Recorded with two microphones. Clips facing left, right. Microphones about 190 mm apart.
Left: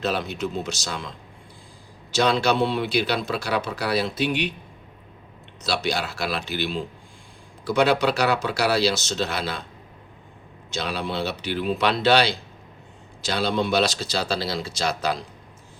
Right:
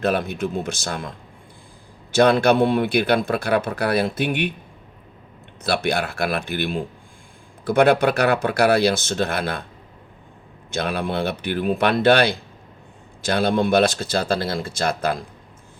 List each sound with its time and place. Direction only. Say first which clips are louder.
0.0 s speech: right 4 dB; 55° right (ahead or behind)
2.1 s speech: right 5 dB; 55° right (ahead or behind)
5.6 s speech: right 4 dB; 55° right (ahead or behind)
10.7 s speech: right 4 dB; 55° right (ahead or behind)